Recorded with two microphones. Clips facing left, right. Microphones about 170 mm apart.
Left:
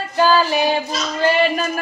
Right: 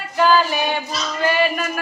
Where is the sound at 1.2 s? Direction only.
30° left (ahead or behind).